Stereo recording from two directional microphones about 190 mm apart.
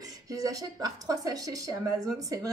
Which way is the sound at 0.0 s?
20° right (ahead or behind).